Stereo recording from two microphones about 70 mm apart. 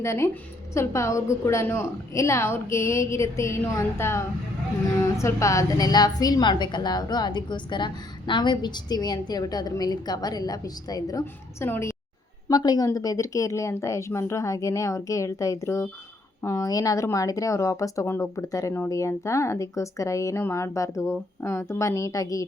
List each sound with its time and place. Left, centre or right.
0.0 s a woman's voice: left
11.6 s a woman's voice: left
12.5 s a woman's voice: left
12.9 s a woman's voice: left
16.6 s speech: left
18.0 s a woman's voice: left
18.4 s speech: left